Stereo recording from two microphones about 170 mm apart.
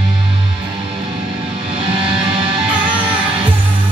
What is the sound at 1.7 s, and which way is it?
Music, 30° right (ahead or behind).